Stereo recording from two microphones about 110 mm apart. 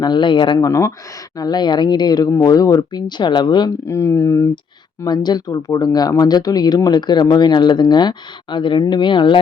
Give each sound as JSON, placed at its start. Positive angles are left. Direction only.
{"t": 0.0, "sound": "speech", "side_deg": 45}
{"t": 0.7, "sound": "speech", "side_deg": 25}
{"t": 1.4, "sound": "speech", "side_deg": 40}
{"t": 3.8, "sound": "speech", "side_deg": 25}
{"t": 5.0, "sound": "speech", "side_deg": 40}